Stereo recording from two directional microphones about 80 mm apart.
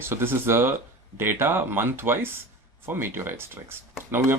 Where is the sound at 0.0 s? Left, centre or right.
Right.